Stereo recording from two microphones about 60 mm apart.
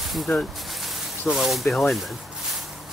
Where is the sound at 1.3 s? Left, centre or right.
Centre.